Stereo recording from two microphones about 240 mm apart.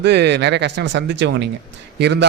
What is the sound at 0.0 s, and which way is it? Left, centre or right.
A man's voice, right.